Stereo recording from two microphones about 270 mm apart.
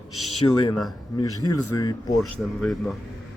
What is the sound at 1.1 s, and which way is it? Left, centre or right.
Speech, centre.